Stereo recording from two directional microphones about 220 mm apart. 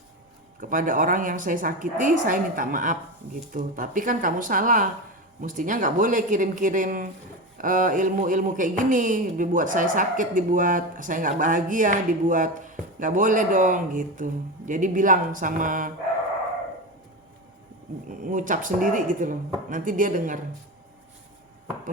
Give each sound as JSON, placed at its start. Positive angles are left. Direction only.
{"t": 0.6, "sound": "speech", "side_deg": -40}
{"t": 18.1, "sound": "speech", "side_deg": -35}